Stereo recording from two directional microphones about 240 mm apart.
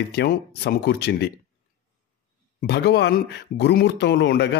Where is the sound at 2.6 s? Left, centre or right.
Left.